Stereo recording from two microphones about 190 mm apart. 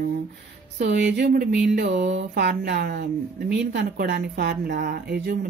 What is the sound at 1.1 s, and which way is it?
Speech, 60° right (ahead or behind).